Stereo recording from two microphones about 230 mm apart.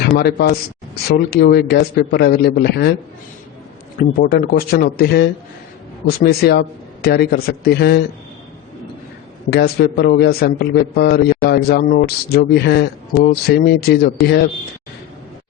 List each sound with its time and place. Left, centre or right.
0.2 s a man's voice: left
3.9 s a man's voice: left
9.5 s a man's voice: left